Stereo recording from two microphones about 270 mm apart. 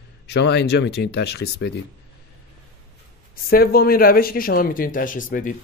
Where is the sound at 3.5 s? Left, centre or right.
Left.